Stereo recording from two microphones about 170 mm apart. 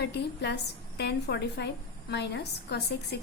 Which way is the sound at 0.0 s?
80° left.